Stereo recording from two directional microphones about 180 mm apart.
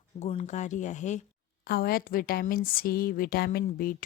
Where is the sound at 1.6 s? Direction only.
60° left (ahead or behind).